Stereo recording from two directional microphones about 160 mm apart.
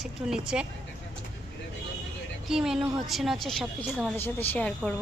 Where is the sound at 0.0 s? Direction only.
5° right (ahead or behind).